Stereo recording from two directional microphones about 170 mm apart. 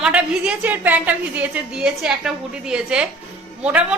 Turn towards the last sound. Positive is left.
turn(degrees=-10)  # may be behind; listen again after turning